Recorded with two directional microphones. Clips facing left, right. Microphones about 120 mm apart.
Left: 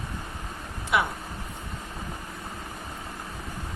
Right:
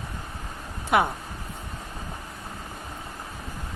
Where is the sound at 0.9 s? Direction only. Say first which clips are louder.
Right 4 dB; 45° right (ahead or behind).